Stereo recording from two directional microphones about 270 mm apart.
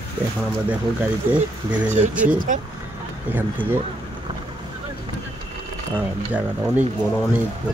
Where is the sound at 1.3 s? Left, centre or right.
Centre.